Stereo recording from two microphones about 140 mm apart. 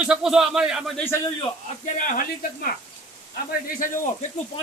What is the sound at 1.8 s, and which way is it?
Speech, 70° left (ahead or behind).